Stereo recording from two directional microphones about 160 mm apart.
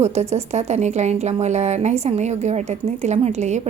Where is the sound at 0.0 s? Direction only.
45° right (ahead or behind).